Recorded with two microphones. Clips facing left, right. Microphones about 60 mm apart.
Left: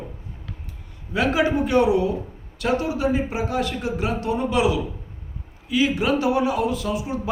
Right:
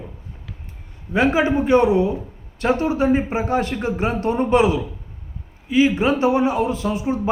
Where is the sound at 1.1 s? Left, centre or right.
Right.